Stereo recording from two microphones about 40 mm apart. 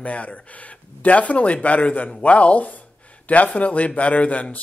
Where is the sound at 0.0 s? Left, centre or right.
Left.